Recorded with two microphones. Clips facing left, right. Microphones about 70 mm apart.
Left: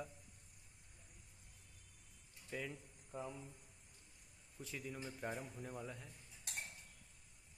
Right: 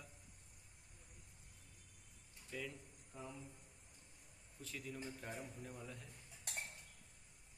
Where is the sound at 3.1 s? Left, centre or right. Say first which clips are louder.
Left 6 dB; left.